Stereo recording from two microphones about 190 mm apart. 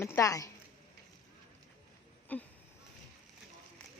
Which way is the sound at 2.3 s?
10° left (ahead or behind).